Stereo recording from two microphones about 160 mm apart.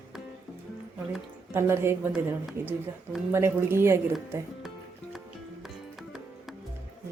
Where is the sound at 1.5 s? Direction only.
15° right (ahead or behind).